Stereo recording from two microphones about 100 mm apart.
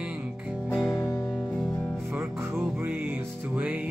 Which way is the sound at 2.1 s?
20° right (ahead or behind).